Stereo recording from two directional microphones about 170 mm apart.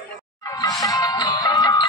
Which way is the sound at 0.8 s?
20° left (ahead or behind).